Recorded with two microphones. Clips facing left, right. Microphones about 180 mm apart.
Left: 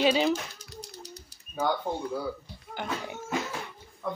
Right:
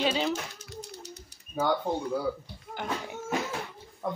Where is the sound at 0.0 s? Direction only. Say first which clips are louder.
Left 4 dB; 5° left (ahead or behind).